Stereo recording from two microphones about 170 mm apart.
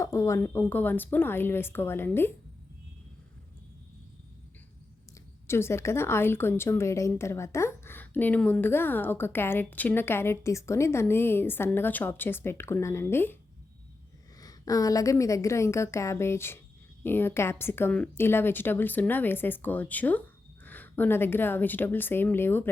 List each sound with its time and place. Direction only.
0.0 s a woman's voice: 15° left (ahead or behind)
5.5 s a woman's voice: 15° left (ahead or behind)
14.4 s a woman's voice: 20° left (ahead or behind)